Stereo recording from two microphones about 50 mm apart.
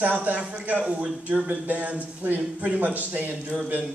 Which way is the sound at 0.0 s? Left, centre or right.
Right.